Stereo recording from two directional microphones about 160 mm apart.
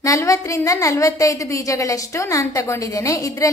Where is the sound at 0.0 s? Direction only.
20° left (ahead or behind).